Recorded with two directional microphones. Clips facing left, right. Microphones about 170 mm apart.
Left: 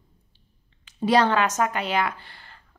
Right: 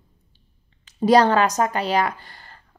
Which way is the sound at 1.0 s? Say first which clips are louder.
Right 4 dB; 40° right (ahead or behind).